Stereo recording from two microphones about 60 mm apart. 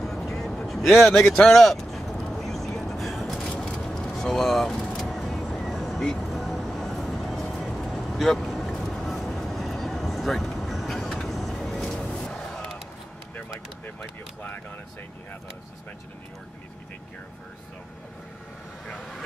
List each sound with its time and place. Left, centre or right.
0.0 s vehicle: centre
1.2 s speech: centre
2.3 s vehicle: centre
3.4 s vehicle: centre
3.7 s vehicle: centre
12.1 s music: centre
18.9 s vehicle: centre